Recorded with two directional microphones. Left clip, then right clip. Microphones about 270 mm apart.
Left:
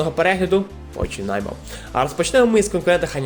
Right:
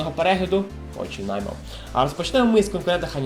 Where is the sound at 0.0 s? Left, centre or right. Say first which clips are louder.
Left 3 dB; left.